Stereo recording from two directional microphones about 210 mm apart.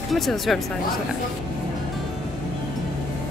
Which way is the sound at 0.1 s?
Centre (ahead or behind).